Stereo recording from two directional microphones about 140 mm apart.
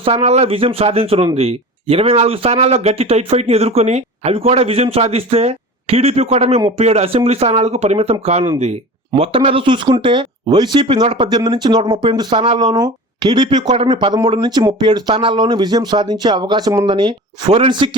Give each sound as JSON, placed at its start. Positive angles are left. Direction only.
{"t": 0.0, "sound": "speech", "side_deg": -45}
{"t": 11.0, "sound": "speech", "side_deg": -45}
{"t": 11.3, "sound": "speech", "side_deg": -30}